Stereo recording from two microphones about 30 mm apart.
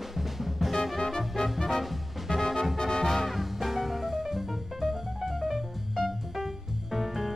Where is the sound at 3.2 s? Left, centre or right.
Centre.